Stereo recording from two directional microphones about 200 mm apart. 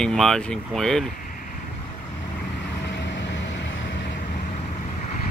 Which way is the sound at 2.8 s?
65° left (ahead or behind).